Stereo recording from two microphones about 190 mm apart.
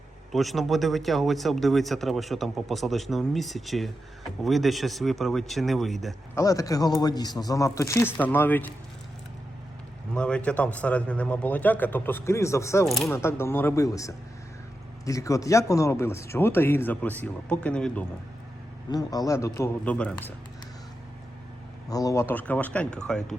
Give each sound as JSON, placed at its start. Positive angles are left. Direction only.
{"t": 0.3, "sound": "a man's voice", "side_deg": 0}
{"t": 6.3, "sound": "speech", "side_deg": 15}
{"t": 10.2, "sound": "speech", "side_deg": 5}
{"t": 12.8, "sound": "a man's voice", "side_deg": 0}
{"t": 13.1, "sound": "speech", "side_deg": 10}
{"t": 18.9, "sound": "speech", "side_deg": 20}
{"t": 21.8, "sound": "speech", "side_deg": 20}